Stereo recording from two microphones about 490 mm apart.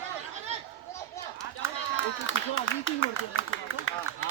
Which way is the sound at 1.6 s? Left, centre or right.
Left.